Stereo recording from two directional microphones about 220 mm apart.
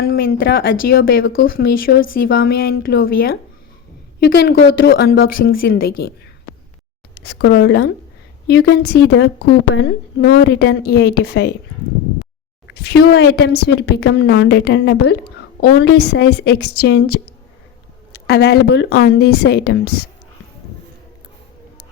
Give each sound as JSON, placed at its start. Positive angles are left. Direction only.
{"t": 0.0, "sound": "a woman's voice", "side_deg": 45}
{"t": 12.6, "sound": "a woman's voice", "side_deg": 50}